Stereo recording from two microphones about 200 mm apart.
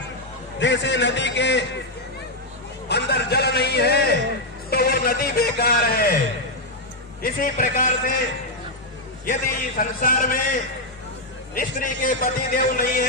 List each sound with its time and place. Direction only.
0.6 s a man's voice: 60° left (ahead or behind)
2.9 s a sound: 55° left (ahead or behind)
7.2 s a man's voice: 45° left (ahead or behind)
9.2 s a man's voice: 45° left (ahead or behind)